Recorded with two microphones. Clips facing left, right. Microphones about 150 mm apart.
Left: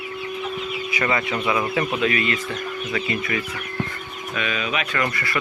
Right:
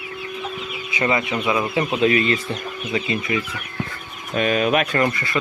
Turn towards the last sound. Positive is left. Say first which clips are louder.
# right 3 dB
turn(degrees=-20)  # may be behind; listen again after turning